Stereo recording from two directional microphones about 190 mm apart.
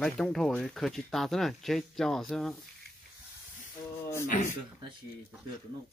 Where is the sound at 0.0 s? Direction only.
5° left (ahead or behind).